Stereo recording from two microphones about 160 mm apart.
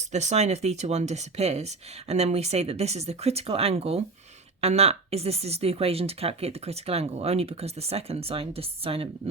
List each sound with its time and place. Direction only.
0.0 s speech: 45° right (ahead or behind)